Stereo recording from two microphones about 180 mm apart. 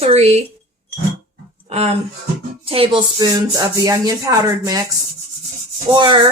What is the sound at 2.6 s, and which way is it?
Rub, 30° right (ahead or behind).